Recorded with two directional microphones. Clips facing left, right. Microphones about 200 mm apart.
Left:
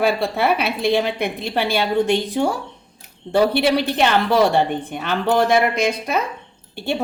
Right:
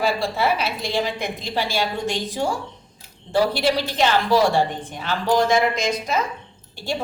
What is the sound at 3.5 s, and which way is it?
Cutlery, 60° left (ahead or behind).